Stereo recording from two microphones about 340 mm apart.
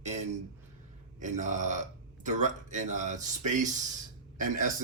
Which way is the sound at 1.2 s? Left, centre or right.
Right.